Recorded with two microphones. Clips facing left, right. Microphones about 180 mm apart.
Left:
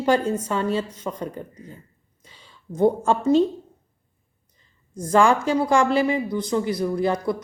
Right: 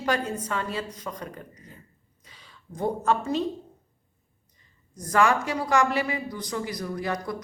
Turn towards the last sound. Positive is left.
turn(degrees=30)  # may be behind; listen again after turning